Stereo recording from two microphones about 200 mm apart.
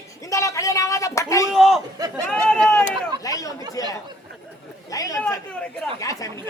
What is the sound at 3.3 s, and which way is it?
Chatter, 15° left (ahead or behind).